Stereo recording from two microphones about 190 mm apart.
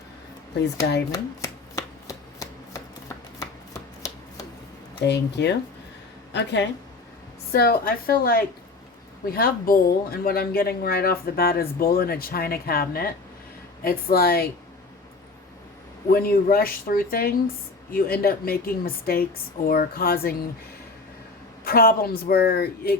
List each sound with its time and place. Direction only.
1.1 s shuffling cards: 15° left (ahead or behind)
5.0 s a woman's voice: 60° left (ahead or behind)
7.5 s speech: 55° left (ahead or behind)
16.0 s speech: 50° left (ahead or behind)
21.6 s speech: 55° left (ahead or behind)